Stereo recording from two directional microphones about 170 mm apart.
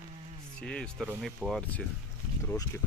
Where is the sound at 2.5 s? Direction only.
15° left (ahead or behind).